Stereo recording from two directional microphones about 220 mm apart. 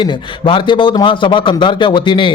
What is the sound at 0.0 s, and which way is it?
A man's voice, 20° left (ahead or behind).